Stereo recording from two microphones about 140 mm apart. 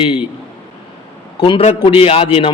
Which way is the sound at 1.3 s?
40° left (ahead or behind).